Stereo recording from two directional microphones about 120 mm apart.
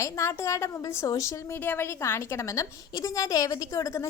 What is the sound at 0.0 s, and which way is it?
A woman's voice, 25° left (ahead or behind).